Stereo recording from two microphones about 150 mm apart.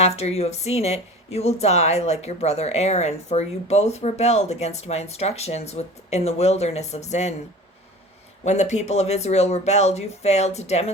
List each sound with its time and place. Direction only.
0.0 s speech: 45° left (ahead or behind)
8.4 s speech: 50° left (ahead or behind)